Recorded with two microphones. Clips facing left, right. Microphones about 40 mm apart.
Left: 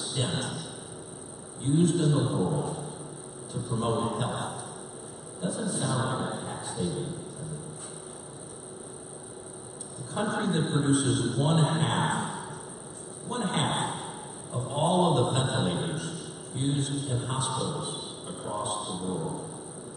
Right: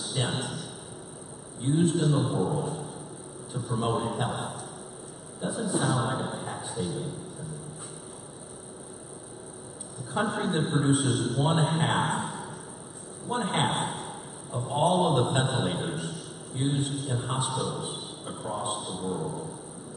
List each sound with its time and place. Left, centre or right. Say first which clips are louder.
0.0 s speech: right 1 dB; centre
1.6 s a man's voice: even; centre
5.4 s speech: right 3 dB; centre
5.9 s music: right 1 dB; centre
6.7 s a man's voice: left 1 dB; centre
10.2 s a man's voice: left 1 dB; centre
12.1 s a sound: even; centre
13.3 s a man's voice: right 2 dB; centre
13.7 s a sound: even; centre
14.6 s a sound: right 1 dB; centre
15.2 s a man's voice: right 1 dB; centre
16.0 s a sound: even; centre
16.9 s a man's voice: even; centre